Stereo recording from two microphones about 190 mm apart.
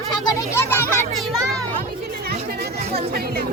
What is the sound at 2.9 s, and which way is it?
Music, 55° right (ahead or behind).